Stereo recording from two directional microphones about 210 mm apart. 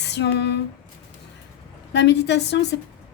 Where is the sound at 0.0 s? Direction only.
55° left (ahead or behind).